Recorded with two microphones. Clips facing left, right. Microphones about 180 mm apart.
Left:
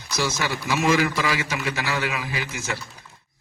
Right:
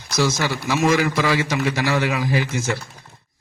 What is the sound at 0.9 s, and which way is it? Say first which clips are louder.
A man's voice: right 3 dB; 50° right (ahead or behind).